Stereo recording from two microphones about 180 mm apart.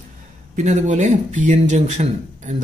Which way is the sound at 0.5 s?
40° right (ahead or behind).